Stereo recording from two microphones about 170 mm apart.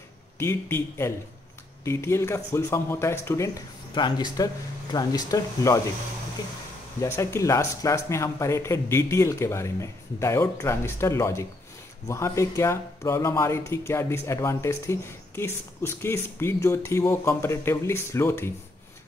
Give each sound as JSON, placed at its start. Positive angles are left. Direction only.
{"t": 0.4, "sound": "speech", "side_deg": 15}
{"t": 7.0, "sound": "speech", "side_deg": 15}